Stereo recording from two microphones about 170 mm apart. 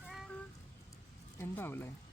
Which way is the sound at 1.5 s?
15° left (ahead or behind).